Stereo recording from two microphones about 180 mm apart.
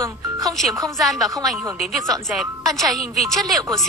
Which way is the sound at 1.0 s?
Centre (ahead or behind).